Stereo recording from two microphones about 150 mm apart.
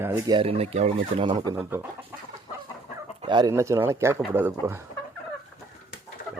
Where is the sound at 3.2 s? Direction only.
30° right (ahead or behind).